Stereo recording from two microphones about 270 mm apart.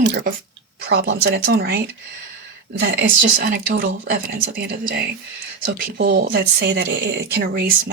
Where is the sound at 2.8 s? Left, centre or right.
Right.